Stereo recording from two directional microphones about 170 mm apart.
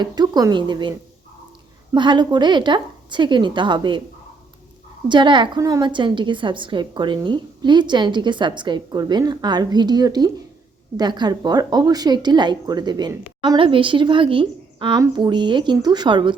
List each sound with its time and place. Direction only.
0.0 s a woman's voice: 25° right (ahead or behind)
5.0 s a woman's voice: 25° right (ahead or behind)